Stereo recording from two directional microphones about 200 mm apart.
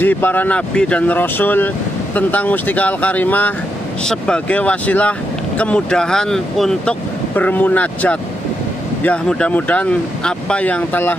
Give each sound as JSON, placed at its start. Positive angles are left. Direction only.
{"t": 0.0, "sound": "speech", "side_deg": 10}